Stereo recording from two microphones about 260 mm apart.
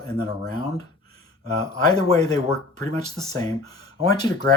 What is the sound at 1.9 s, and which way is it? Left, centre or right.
Speech, centre.